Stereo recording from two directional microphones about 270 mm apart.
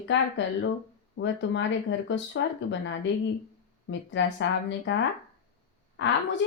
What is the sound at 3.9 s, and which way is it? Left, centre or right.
Speech, left.